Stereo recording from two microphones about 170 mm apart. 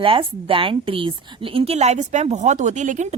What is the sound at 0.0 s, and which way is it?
A woman's voice, 30° right (ahead or behind).